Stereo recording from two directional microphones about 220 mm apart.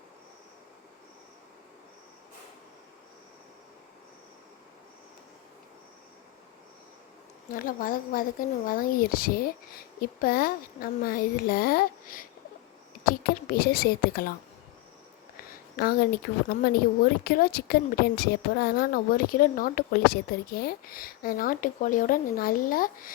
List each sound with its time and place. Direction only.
7.5 s a woman's voice: 40° left (ahead or behind)
15.7 s a woman's voice: 45° left (ahead or behind)